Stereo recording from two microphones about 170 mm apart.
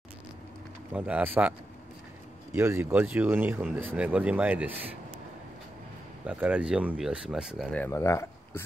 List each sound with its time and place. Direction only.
0.9 s speech: 10° right (ahead or behind)
2.5 s speech: 15° right (ahead or behind)
6.2 s speech: 10° right (ahead or behind)
7.7 s speech: 15° left (ahead or behind)